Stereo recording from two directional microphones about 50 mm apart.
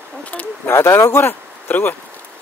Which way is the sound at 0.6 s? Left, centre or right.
Left.